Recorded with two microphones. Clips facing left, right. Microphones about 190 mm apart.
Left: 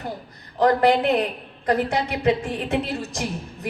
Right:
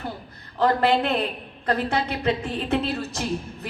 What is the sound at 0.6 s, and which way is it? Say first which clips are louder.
A woman's voice: left 3 dB; 15° left (ahead or behind).